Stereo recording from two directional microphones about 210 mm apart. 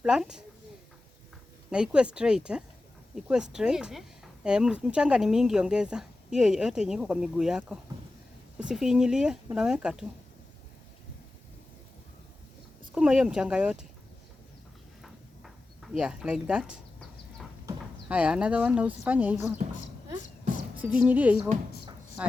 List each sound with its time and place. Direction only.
0.0 s speech: 5° right (ahead or behind)
1.7 s speech: 5° right (ahead or behind)
12.9 s speech: 5° right (ahead or behind)
15.0 s a sound: centre (ahead or behind)
17.7 s speech: 5° right (ahead or behind)
20.9 s a woman's voice: 5° right (ahead or behind)